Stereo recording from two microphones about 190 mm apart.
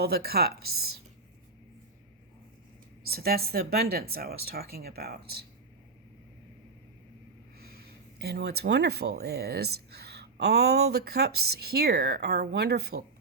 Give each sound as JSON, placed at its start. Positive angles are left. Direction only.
{"t": 0.0, "sound": "speech", "side_deg": -55}
{"t": 3.1, "sound": "speech", "side_deg": -55}
{"t": 7.6, "sound": "speech", "side_deg": -55}